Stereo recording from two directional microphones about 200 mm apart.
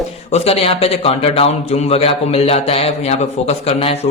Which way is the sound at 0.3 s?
30° left (ahead or behind).